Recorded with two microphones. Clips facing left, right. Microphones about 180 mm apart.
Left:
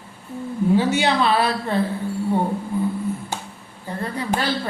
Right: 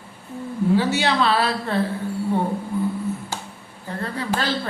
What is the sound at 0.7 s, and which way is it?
Speech, 20° left (ahead or behind).